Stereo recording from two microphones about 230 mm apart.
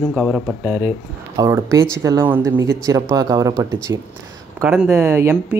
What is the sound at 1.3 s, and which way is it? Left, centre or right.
Speech, centre.